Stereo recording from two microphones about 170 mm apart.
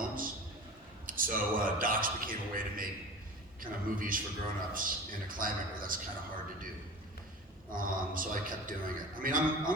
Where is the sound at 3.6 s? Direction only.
55° right (ahead or behind).